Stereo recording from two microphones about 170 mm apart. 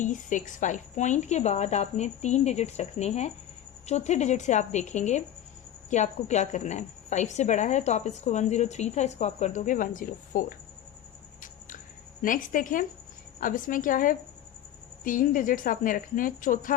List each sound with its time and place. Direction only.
0.0 s a woman's voice: 45° left (ahead or behind)
12.2 s a woman's voice: 50° left (ahead or behind)